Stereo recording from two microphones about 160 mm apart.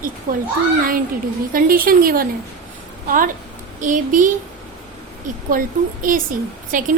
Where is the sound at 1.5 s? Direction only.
60° right (ahead or behind).